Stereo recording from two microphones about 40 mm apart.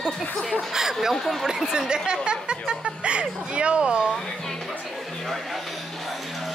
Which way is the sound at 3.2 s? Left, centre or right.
Right.